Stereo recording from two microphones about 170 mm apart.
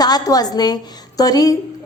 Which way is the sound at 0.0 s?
25° left (ahead or behind).